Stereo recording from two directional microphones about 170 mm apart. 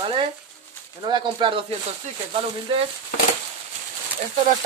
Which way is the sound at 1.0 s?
25° right (ahead or behind).